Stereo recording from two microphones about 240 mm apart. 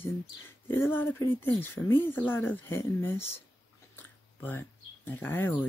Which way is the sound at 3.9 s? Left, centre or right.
Centre.